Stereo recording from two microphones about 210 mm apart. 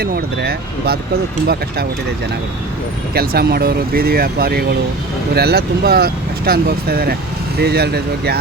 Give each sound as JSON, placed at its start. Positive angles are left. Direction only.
{"t": 0.0, "sound": "speech", "side_deg": -50}
{"t": 3.2, "sound": "speech", "side_deg": -45}